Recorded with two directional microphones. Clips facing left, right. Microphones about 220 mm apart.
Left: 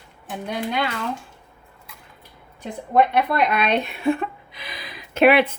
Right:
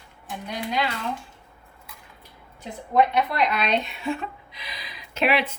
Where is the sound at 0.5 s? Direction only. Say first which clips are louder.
Left 2 dB; 55° left (ahead or behind).